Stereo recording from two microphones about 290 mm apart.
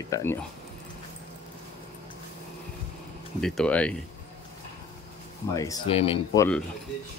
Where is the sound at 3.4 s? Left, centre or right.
Centre.